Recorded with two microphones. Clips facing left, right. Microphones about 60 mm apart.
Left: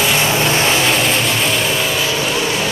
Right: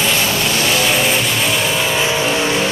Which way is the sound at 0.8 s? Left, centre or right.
Centre.